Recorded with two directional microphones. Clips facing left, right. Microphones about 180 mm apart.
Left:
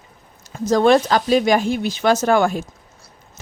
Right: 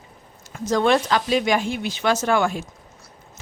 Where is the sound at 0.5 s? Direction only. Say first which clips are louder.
Left 5 dB; 40° left (ahead or behind).